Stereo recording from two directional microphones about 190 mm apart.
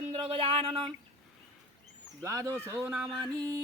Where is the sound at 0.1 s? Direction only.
30° right (ahead or behind).